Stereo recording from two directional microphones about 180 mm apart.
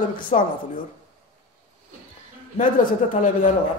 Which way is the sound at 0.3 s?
35° left (ahead or behind).